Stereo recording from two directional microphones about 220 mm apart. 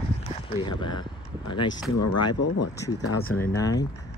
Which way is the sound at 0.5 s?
20° left (ahead or behind).